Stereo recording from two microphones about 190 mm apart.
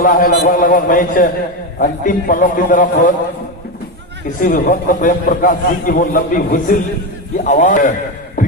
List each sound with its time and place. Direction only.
0.0 s a man's voice: 45° left (ahead or behind)
4.4 s a man's voice: 45° left (ahead or behind)
8.4 s music: 45° left (ahead or behind)